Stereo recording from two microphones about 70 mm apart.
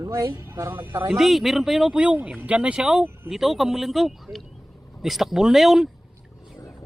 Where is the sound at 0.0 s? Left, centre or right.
Right.